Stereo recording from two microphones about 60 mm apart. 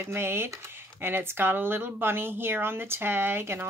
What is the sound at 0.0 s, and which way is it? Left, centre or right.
Speech, right.